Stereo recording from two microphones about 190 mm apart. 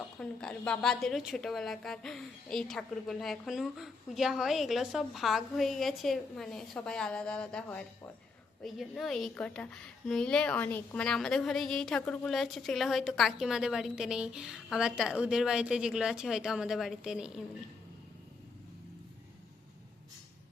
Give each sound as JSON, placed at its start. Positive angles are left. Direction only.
{"t": 0.2, "sound": "a woman's voice", "side_deg": 5}